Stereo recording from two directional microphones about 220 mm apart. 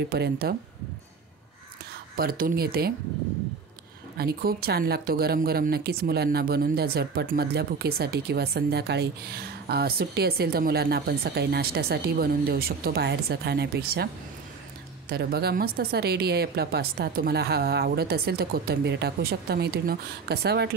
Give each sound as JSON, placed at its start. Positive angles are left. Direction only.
{"t": 0.1, "sound": "speech", "side_deg": -45}
{"t": 2.1, "sound": "speech", "side_deg": -40}
{"t": 4.2, "sound": "speech", "side_deg": -45}
{"t": 15.0, "sound": "speech", "side_deg": -45}